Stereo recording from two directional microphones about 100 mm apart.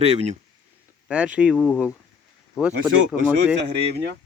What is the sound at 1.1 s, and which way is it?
Speech, 10° right (ahead or behind).